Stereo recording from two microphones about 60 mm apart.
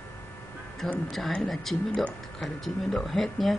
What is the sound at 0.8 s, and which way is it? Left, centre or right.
Speech, centre.